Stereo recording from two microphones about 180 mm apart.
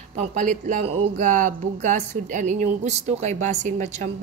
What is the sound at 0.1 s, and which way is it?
Speech, 40° right (ahead or behind).